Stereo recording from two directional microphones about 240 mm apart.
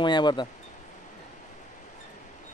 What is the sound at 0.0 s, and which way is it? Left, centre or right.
Speech, centre.